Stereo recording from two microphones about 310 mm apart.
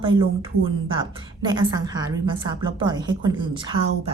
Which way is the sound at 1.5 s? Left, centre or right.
Centre.